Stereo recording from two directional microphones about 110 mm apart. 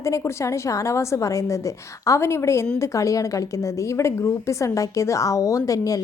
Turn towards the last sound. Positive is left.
turn(degrees=30)  # may be behind; listen again after turning